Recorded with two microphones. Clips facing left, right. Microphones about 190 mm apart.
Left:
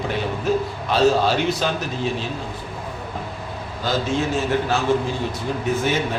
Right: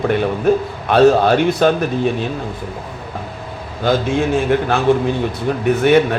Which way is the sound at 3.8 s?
55° right (ahead or behind).